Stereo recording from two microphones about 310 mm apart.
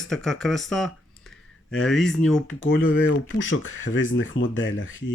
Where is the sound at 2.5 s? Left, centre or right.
Left.